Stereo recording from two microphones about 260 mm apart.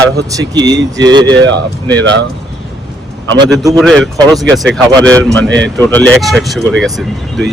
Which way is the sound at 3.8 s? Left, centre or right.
Centre.